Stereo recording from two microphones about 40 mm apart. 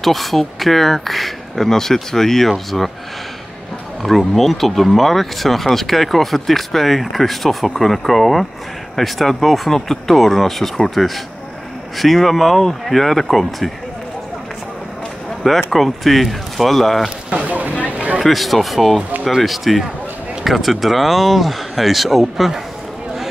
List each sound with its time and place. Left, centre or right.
0.0 s speech: centre
4.0 s speech: centre
15.4 s speech: centre
17.3 s a sound: right
18.2 s speech: centre